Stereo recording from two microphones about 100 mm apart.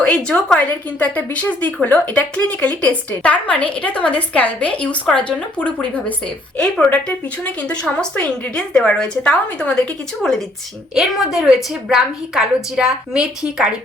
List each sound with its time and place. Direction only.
0.0 s speech: 10° left (ahead or behind)
7.4 s speech: 15° left (ahead or behind)
10.9 s a woman's voice: 5° right (ahead or behind)